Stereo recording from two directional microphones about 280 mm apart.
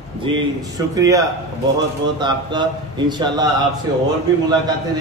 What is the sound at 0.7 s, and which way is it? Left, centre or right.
A man's voice, centre.